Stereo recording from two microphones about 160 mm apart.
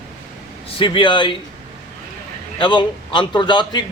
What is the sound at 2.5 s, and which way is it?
A man's voice, 30° left (ahead or behind).